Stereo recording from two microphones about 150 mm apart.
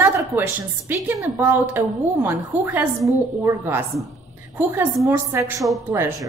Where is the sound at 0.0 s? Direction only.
10° right (ahead or behind).